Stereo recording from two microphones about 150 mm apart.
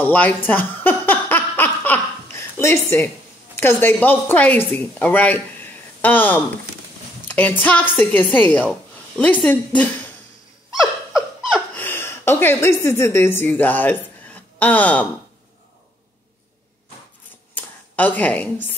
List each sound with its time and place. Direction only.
0.0 s a sound: 10° left (ahead or behind)
3.5 s a woman's voice: 15° left (ahead or behind)
7.2 s a sound: 10° left (ahead or behind)
7.6 s a woman's voice: 10° left (ahead or behind)
10.7 s breathing: 5° right (ahead or behind)
11.7 s a woman's voice: 15° left (ahead or behind)
17.6 s speech: 10° left (ahead or behind)